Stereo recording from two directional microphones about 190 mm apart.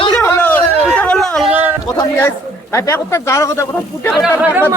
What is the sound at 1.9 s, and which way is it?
A man's voice, 15° left (ahead or behind).